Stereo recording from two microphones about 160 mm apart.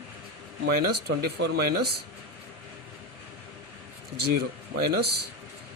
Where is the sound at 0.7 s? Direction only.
80° right.